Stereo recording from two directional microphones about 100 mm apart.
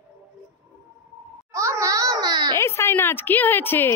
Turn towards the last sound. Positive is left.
turn(degrees=20)  # may be behind; listen again after turning